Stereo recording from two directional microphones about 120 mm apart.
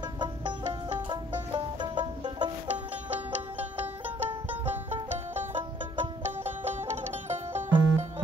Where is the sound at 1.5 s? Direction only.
45° right (ahead or behind).